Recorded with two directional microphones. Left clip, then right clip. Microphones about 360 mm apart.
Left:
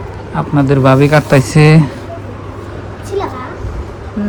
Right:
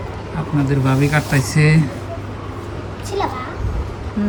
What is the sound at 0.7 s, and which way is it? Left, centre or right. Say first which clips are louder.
Speech: left 11 dB; centre.